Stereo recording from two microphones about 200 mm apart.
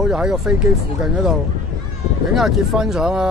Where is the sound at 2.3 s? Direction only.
Centre (ahead or behind).